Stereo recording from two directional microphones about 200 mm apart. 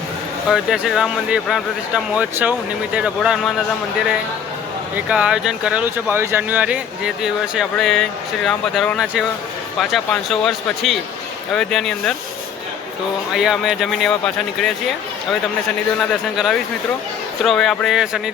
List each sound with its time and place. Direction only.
0.5 s speech: centre (ahead or behind)
4.9 s speech: 5° right (ahead or behind)
13.3 s speech: centre (ahead or behind)
16.0 s speech: centre (ahead or behind)